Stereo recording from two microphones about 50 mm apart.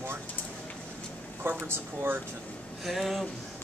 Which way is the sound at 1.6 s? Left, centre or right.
Right.